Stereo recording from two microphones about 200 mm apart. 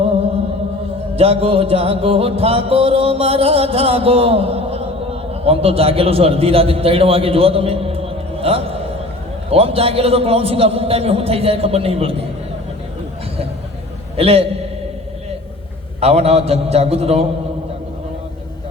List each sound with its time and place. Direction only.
1.1 s music: 30° right (ahead or behind)
5.3 s a man's voice: 30° right (ahead or behind)
9.5 s music: 30° right (ahead or behind)
14.2 s music: 30° right (ahead or behind)
16.0 s a man's voice: 30° right (ahead or behind)